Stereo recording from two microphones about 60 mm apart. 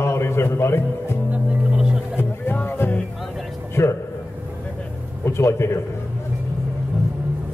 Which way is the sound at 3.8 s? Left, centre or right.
Left.